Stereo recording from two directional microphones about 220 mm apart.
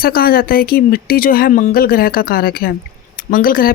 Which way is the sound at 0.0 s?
45° left (ahead or behind).